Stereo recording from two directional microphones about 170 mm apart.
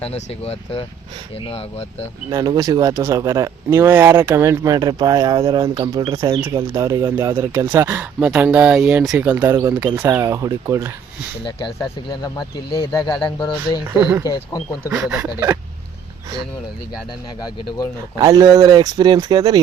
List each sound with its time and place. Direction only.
0.0 s speech: 35° left (ahead or behind)
2.3 s speech: 20° right (ahead or behind)
12.2 s speech: 25° left (ahead or behind)
14.0 s speech: 10° right (ahead or behind)
17.4 s speech: 25° left (ahead or behind)
18.2 s speech: 20° right (ahead or behind)